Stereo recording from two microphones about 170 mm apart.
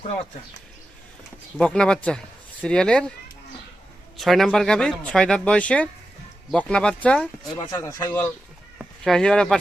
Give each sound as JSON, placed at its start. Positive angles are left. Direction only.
{"t": 1.5, "sound": "speech", "side_deg": 5}
{"t": 4.2, "sound": "speech", "side_deg": 0}
{"t": 7.5, "sound": "speech", "side_deg": 20}
{"t": 9.0, "sound": "speech", "side_deg": 5}